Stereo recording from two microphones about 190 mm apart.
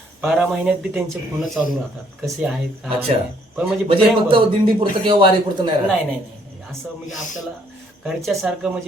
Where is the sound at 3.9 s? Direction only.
25° right (ahead or behind).